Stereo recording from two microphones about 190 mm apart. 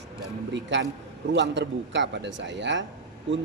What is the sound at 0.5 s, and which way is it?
Speech, 70° right (ahead or behind).